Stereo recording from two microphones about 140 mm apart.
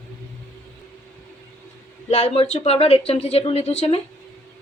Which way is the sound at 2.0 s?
50° left (ahead or behind).